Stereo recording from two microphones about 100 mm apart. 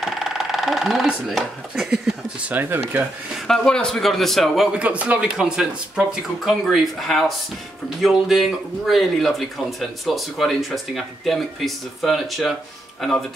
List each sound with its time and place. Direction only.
0.0 s speech: 5° right (ahead or behind)
2.4 s speech: 20° right (ahead or behind)
3.3 s speech: 5° left (ahead or behind)
4.7 s speech: 15° right (ahead or behind)